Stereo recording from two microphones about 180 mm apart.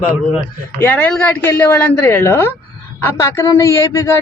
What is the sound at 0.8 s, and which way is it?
Speech, 10° left (ahead or behind).